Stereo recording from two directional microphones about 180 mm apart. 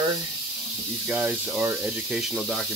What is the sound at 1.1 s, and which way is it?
Speech, 10° right (ahead or behind).